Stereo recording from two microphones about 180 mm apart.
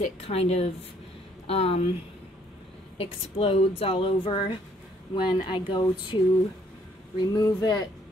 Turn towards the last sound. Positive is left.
turn(degrees=20)  # may be behind; listen again after turning